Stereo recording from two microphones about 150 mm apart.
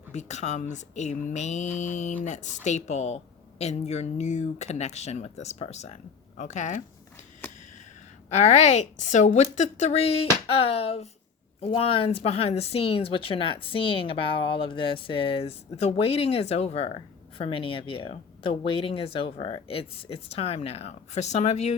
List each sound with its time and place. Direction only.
0.1 s speech: 50° left (ahead or behind)
8.3 s speech: 50° left (ahead or behind)